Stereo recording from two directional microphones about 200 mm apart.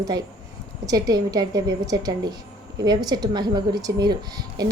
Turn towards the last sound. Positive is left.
turn(degrees=-20)  # may be behind; listen again after turning